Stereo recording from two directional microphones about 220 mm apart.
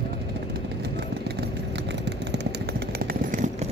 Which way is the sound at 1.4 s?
50° right (ahead or behind).